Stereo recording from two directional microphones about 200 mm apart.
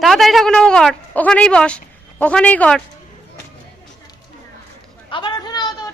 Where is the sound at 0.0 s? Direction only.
Centre (ahead or behind).